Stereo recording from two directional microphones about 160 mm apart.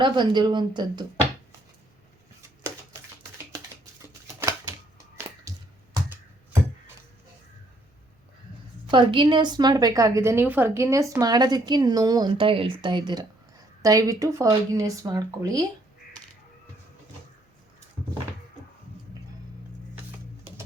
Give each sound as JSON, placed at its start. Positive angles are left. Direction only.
{"t": 0.0, "sound": "a woman's voice", "side_deg": -30}
{"t": 5.5, "sound": "a sound", "side_deg": -20}
{"t": 8.9, "sound": "a woman's voice", "side_deg": -30}